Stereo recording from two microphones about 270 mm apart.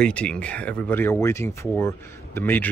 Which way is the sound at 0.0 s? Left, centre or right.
Centre.